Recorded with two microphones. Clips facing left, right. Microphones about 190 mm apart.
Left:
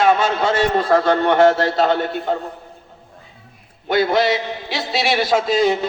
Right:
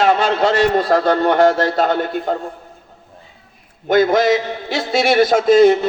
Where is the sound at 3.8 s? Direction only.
45° right (ahead or behind).